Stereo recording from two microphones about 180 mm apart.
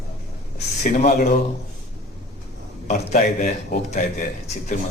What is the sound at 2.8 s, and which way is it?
A man's voice, 40° left (ahead or behind).